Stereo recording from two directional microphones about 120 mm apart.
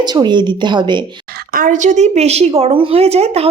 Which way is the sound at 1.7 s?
85° right.